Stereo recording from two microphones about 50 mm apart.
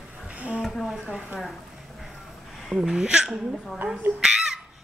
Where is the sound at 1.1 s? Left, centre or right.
Right.